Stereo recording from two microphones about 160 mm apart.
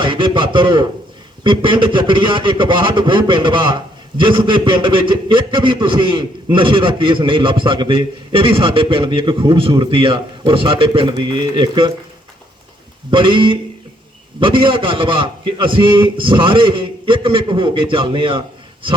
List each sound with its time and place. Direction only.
0.0 s a man's voice: 30° right (ahead or behind)
13.1 s a man's voice: 30° right (ahead or behind)